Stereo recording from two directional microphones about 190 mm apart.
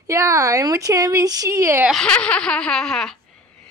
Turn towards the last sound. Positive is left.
turn(degrees=0)  # may be behind; listen again after turning